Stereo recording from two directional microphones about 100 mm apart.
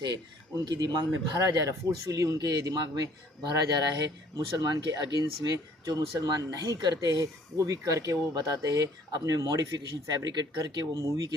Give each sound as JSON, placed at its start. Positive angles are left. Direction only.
{"t": 0.6, "sound": "speech", "side_deg": -40}
{"t": 4.4, "sound": "speech", "side_deg": -40}